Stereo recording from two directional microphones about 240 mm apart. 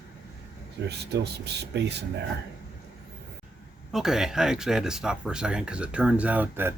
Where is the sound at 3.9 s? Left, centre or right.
Centre.